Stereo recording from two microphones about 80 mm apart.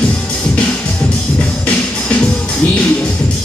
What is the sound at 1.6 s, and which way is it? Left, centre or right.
Music, centre.